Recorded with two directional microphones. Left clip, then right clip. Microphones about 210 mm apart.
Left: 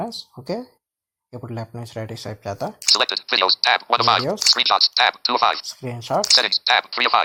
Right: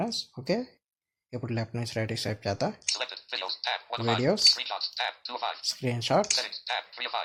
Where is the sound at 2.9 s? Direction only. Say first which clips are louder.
Left 15 dB; 50° left (ahead or behind).